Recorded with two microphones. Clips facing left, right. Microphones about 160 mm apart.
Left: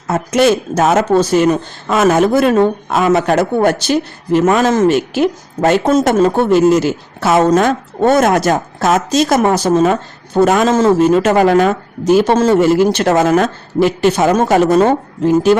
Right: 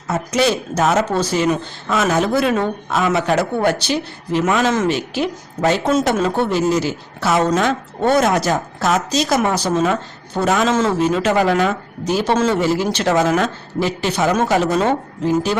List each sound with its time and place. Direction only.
0.1 s speech: 50° left (ahead or behind)